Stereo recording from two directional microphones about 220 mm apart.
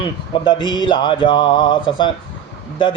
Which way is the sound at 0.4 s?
20° left (ahead or behind).